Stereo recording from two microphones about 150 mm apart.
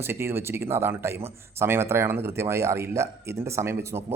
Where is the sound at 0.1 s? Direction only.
15° right (ahead or behind).